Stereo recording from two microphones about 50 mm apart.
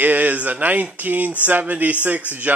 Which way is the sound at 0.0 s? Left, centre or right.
Right.